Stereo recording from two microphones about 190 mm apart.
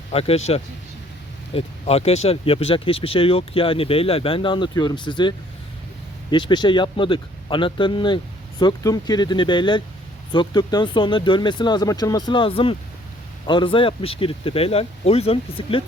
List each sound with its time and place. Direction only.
0.1 s speech: 30° left (ahead or behind)
6.3 s speech: 25° left (ahead or behind)